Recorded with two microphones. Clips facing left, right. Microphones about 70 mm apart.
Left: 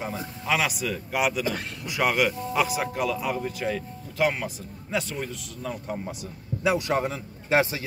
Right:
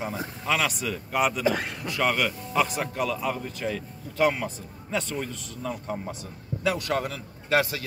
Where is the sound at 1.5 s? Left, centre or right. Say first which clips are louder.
Right 4 dB; right.